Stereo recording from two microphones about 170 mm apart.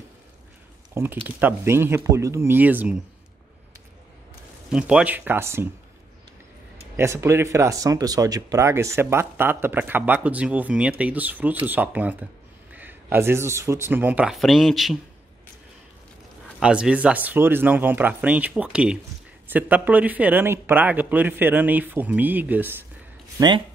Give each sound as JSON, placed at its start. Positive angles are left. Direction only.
{"t": 0.9, "sound": "speech", "side_deg": -10}
{"t": 4.6, "sound": "speech", "side_deg": -5}
{"t": 7.0, "sound": "speech", "side_deg": -15}
{"t": 16.5, "sound": "speech", "side_deg": -5}